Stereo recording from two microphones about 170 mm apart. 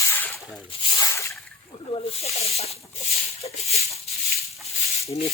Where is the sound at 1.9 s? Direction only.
35° left (ahead or behind).